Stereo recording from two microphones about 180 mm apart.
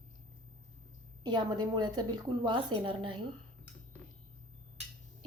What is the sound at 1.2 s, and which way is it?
A woman's voice, 25° right (ahead or behind).